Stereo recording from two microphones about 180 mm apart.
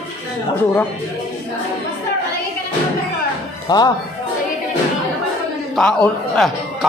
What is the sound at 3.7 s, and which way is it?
Speech, 20° left (ahead or behind).